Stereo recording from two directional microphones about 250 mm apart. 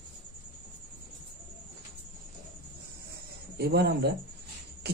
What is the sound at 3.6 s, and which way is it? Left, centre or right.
Speech, right.